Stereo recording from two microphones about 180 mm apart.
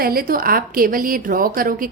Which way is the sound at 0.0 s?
55° right (ahead or behind).